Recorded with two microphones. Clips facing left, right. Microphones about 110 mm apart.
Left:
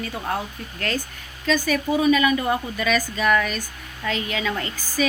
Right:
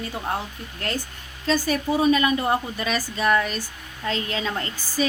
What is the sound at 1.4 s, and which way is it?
A woman's voice, 35° right (ahead or behind).